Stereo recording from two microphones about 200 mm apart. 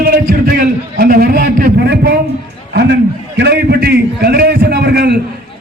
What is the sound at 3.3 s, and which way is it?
A man's voice, 55° right (ahead or behind).